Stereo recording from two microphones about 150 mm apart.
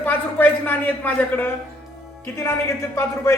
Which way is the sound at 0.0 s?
10° left (ahead or behind).